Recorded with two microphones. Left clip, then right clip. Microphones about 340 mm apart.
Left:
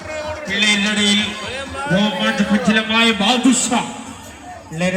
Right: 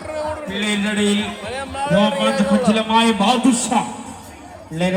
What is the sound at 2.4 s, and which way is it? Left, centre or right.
A man's voice, centre.